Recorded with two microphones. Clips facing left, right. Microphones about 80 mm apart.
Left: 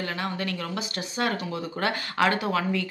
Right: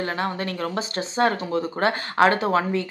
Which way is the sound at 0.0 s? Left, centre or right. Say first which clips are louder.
Right 4 dB; right.